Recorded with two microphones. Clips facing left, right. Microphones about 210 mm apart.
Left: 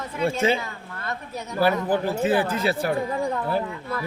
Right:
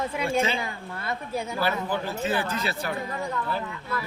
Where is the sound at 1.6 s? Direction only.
50° left (ahead or behind).